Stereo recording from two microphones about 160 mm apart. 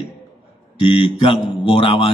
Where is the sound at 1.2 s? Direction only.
35° left (ahead or behind).